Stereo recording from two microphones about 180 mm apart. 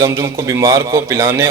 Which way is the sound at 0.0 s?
15° right (ahead or behind).